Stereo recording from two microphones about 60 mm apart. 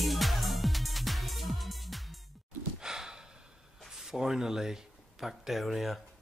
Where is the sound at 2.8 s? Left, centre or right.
Centre.